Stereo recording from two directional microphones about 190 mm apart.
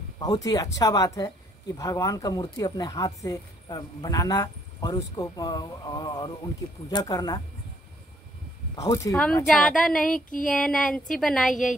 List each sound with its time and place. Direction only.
0.2 s speech: 20° left (ahead or behind)
8.7 s speech: 15° left (ahead or behind)
9.1 s speech: 5° left (ahead or behind)